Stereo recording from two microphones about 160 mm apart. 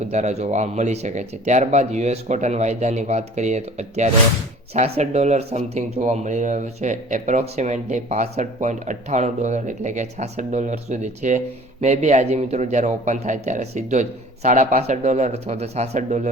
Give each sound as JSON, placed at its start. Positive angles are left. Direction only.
{"t": 0.1, "sound": "speech", "side_deg": -45}